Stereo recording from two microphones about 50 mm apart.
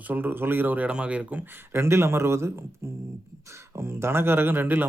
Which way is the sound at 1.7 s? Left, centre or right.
Right.